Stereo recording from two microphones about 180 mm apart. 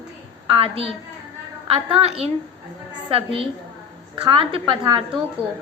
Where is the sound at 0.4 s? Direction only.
30° right (ahead or behind).